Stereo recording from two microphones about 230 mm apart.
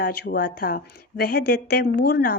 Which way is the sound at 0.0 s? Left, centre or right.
Left.